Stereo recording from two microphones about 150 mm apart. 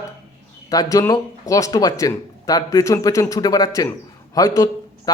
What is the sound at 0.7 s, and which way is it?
A man's voice, 25° left (ahead or behind).